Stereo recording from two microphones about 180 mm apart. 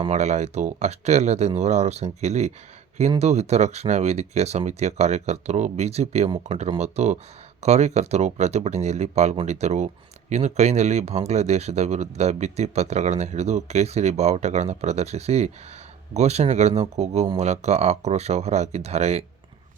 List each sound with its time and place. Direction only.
0.1 s speech: 40° right (ahead or behind)